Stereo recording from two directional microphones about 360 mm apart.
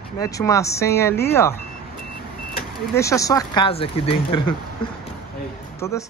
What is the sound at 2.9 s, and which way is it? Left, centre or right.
Speech, centre.